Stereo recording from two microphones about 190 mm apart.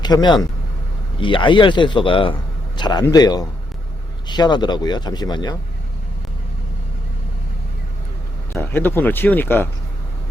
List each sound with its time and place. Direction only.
0.0 s speech: 20° left (ahead or behind)
8.5 s speech: 10° left (ahead or behind)